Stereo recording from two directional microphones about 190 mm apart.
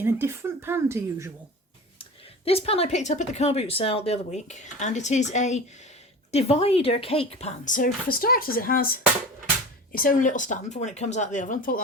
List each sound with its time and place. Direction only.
0.0 s speech: 10° right (ahead or behind)
2.0 s speech: 30° left (ahead or behind)